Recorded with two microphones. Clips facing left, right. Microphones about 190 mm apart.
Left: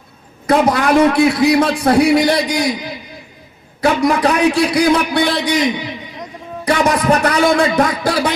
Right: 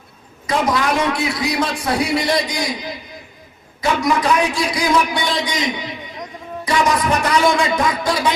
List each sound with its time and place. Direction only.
0.4 s a man's voice: 55° left (ahead or behind)
3.8 s a man's voice: 60° left (ahead or behind)
6.7 s a man's voice: 60° left (ahead or behind)